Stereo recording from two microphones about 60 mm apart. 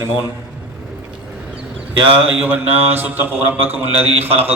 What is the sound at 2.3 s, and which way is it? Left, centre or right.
A man's voice, right.